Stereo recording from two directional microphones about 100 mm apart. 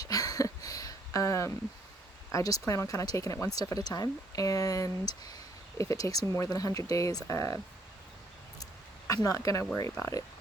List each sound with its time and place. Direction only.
0.0 s a sound: 35° left (ahead or behind)
2.3 s speech: 35° left (ahead or behind)
9.0 s speech: 35° left (ahead or behind)